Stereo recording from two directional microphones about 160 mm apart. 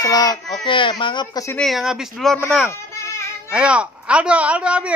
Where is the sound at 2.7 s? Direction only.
15° left (ahead or behind).